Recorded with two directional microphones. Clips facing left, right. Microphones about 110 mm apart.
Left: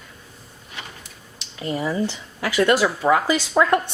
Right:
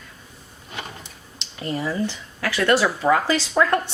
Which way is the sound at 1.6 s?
15° left (ahead or behind).